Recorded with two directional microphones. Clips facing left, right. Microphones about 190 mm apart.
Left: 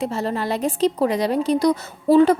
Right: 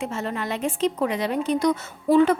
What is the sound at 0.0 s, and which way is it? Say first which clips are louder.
A woman's voice: left 5 dB; 35° left (ahead or behind).